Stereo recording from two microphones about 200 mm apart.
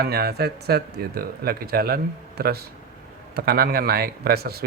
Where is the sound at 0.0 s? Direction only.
50° right (ahead or behind).